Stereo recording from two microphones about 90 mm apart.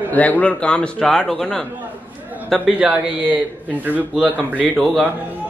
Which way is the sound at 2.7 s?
15° right (ahead or behind).